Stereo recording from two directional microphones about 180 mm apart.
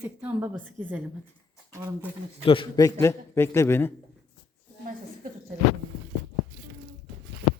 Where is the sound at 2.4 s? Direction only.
30° left (ahead or behind); by 3.9 s 15° left (ahead or behind).